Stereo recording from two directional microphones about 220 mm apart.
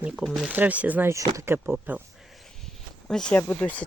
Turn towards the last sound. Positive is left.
turn(degrees=5)  # may be behind; listen again after turning